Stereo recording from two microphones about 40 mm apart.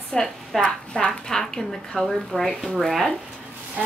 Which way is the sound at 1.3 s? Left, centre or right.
Centre.